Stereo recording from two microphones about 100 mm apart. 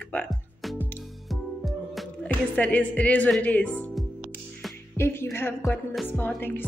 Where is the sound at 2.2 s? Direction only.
15° left (ahead or behind).